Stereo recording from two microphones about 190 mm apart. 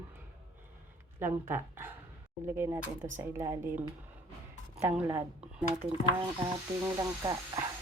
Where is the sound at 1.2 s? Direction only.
10° right (ahead or behind).